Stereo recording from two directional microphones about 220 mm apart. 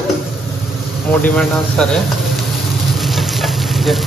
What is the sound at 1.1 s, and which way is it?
Speech, 5° left (ahead or behind).